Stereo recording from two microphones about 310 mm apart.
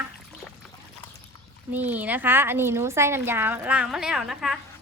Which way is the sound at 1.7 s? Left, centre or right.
Centre.